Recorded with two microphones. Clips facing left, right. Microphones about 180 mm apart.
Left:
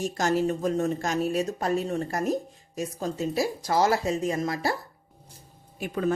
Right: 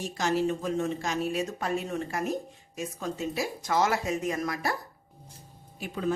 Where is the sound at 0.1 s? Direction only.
45° left (ahead or behind); by 4.8 s 30° left (ahead or behind).